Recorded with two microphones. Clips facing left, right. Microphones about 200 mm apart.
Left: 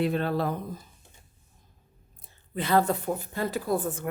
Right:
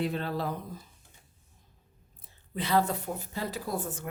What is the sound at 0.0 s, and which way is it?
Speech, 60° left (ahead or behind).